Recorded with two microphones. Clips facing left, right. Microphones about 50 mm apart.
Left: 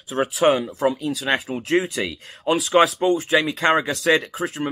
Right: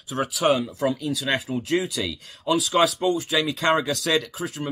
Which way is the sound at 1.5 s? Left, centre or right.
Left.